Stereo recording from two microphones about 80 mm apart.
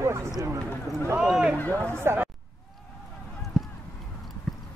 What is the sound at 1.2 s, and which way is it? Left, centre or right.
Speech, centre.